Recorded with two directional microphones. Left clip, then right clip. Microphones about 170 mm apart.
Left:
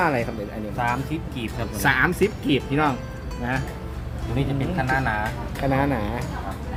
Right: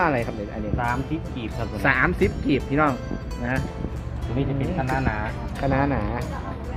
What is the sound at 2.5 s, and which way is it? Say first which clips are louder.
Speech: even; 15° left (ahead or behind).